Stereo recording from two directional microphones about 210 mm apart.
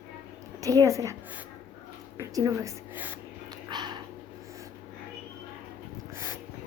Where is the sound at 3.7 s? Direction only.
20° right (ahead or behind).